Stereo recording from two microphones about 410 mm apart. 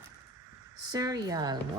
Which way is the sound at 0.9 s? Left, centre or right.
Centre.